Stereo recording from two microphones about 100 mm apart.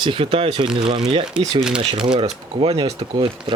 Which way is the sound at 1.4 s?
10° right (ahead or behind).